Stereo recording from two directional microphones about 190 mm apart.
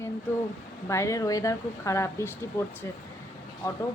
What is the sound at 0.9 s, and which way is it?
Speech, 15° left (ahead or behind).